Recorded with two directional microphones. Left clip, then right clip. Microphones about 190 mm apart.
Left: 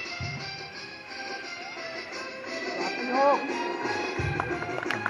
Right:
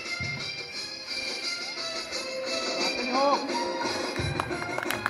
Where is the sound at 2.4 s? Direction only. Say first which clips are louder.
Right 2 dB; 15° right (ahead or behind).